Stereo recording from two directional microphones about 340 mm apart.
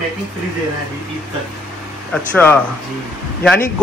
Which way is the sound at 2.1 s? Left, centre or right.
Centre.